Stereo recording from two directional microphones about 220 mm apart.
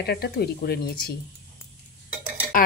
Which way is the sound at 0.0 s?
45° left (ahead or behind).